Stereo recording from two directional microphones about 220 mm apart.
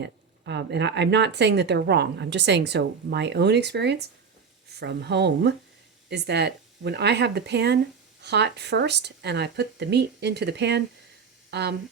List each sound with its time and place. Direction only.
0.0 s a woman's voice: 50° right (ahead or behind)